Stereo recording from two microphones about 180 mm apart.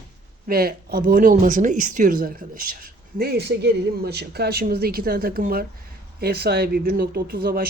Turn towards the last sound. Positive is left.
turn(degrees=-55)  # may be behind; listen again after turning